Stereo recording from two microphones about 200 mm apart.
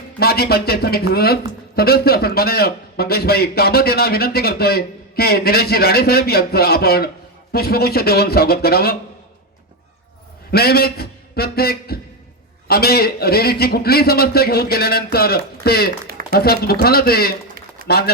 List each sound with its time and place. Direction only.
0.2 s speech: 50° left (ahead or behind)
10.5 s speech: 50° left (ahead or behind)